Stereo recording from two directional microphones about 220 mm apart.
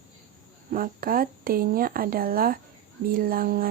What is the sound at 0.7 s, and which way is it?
Speech, 40° right (ahead or behind).